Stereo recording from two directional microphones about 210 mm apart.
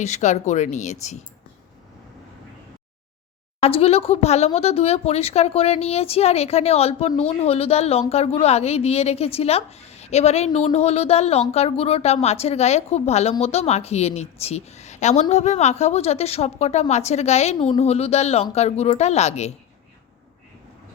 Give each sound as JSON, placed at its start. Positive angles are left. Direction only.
{"t": 0.0, "sound": "a woman's voice", "side_deg": 35}
{"t": 3.6, "sound": "a woman's voice", "side_deg": 30}